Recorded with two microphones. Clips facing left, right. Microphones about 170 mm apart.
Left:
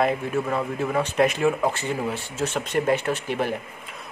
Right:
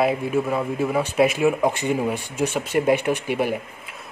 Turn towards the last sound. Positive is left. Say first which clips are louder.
# right 3 dB
turn(degrees=-10)  # may be behind; listen again after turning